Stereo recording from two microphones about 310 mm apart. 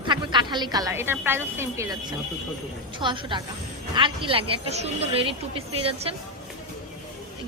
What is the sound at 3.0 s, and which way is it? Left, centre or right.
A woman's voice, centre.